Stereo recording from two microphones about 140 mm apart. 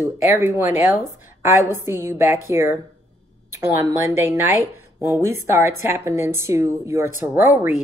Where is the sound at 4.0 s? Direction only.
20° right (ahead or behind).